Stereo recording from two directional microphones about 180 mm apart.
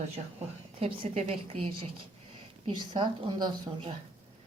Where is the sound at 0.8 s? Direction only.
35° right (ahead or behind).